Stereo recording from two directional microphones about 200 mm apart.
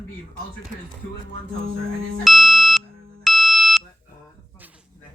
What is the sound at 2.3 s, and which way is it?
Beep, centre (ahead or behind).